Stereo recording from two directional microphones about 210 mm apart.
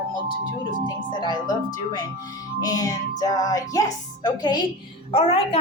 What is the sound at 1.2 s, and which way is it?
A woman's voice, 20° left (ahead or behind).